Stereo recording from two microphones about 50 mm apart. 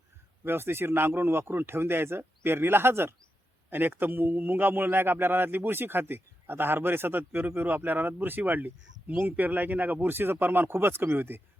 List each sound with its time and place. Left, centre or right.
0.4 s a man's voice: right